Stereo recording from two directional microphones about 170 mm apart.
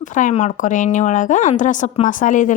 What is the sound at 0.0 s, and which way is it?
Speech, 50° left (ahead or behind).